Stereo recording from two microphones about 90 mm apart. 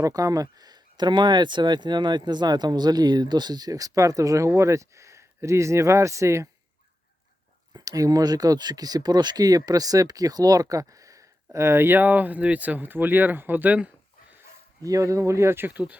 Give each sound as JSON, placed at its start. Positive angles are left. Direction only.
{"t": 0.0, "sound": "speech", "side_deg": -40}
{"t": 7.7, "sound": "speech", "side_deg": -40}
{"t": 14.8, "sound": "speech", "side_deg": -35}